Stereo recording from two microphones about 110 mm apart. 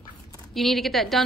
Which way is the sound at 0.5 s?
Centre (ahead or behind).